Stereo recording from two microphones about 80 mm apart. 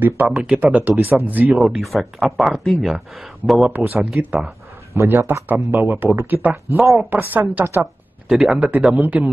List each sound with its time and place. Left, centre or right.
0.0 s speech: right
1.6 s speech: centre
3.7 s speech: centre
4.9 s speech: right
6.3 s speech: centre
7.0 s speech: right
7.8 s a sound: centre
8.5 s speech: centre